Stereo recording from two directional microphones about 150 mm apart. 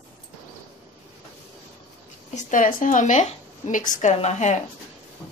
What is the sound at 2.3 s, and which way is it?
A woman's voice, 60° left (ahead or behind).